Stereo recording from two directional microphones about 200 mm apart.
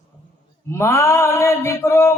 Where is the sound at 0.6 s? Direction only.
15° left (ahead or behind).